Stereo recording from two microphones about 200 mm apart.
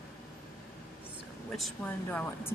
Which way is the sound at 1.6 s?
5° left (ahead or behind).